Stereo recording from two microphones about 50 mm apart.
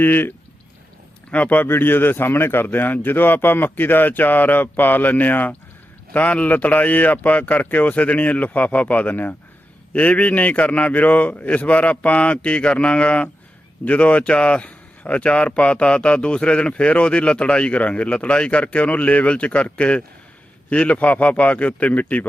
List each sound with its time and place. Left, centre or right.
0.0 s speech: left
1.3 s speech: left
1.6 s speech: left